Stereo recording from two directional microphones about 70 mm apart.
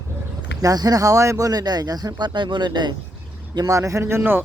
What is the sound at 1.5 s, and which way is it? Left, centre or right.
Speech, right.